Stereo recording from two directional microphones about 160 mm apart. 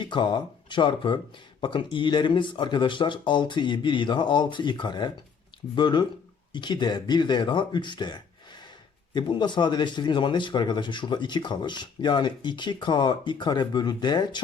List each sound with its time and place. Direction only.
0.0 s speech: 30° left (ahead or behind)